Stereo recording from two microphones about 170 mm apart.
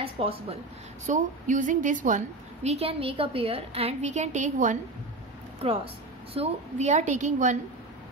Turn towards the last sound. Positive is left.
turn(degrees=-45)  # may be behind; listen again after turning